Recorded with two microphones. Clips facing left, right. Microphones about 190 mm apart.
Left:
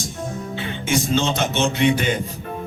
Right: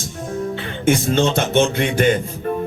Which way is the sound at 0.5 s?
55° right (ahead or behind).